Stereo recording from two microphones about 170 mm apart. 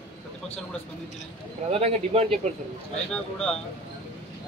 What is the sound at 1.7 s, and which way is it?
Speech, 35° right (ahead or behind).